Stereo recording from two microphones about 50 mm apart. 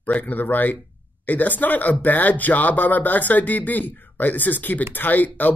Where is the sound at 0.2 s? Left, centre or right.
Left.